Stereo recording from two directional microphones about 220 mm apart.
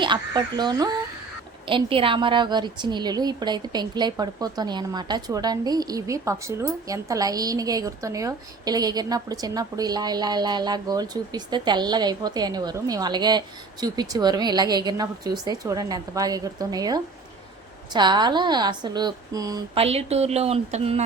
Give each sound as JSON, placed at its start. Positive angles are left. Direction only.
{"t": 0.0, "sound": "a woman's voice", "side_deg": -20}